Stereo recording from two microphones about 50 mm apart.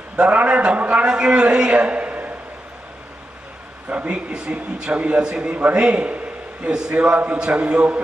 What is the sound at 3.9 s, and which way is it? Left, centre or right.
A man's voice, right.